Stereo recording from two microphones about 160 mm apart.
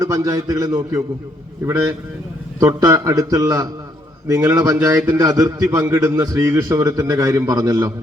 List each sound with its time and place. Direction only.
0.0 s a man's voice: 20° right (ahead or behind)
2.6 s a man's voice: 20° right (ahead or behind)